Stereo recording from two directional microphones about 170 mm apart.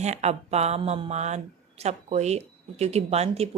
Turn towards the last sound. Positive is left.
turn(degrees=-40)  # may be behind; listen again after turning